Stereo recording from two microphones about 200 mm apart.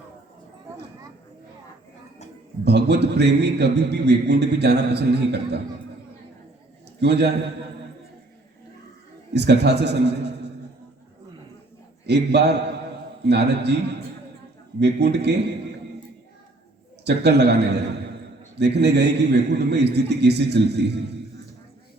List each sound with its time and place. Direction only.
2.6 s a man's voice: 55° right (ahead or behind)
7.0 s a man's voice: 55° right (ahead or behind)
9.3 s a man's voice: 55° right (ahead or behind)
12.0 s a man's voice: 55° right (ahead or behind)
14.8 s a man's voice: 55° right (ahead or behind)
17.0 s a man's voice: 55° right (ahead or behind)